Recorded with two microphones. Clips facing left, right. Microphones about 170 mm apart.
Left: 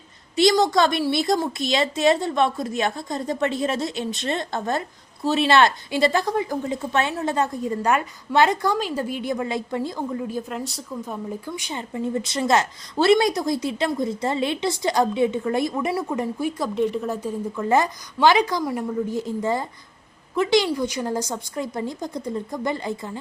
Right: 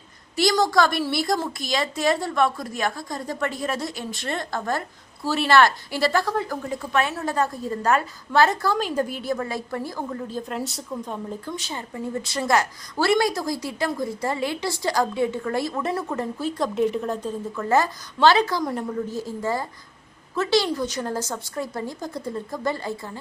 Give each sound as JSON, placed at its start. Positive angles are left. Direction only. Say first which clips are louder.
{"t": 0.5, "sound": "a woman's voice", "louder": "left 1 dB", "side_deg": 20}
{"t": 10.5, "sound": "speech", "louder": "right 1 dB", "side_deg": 0}
{"t": 16.7, "sound": "a woman's voice", "louder": "even", "side_deg": 0}
{"t": 18.6, "sound": "a woman's voice", "louder": "left 1 dB", "side_deg": 5}
{"t": 19.1, "sound": "a woman's voice", "louder": "left 3 dB", "side_deg": 20}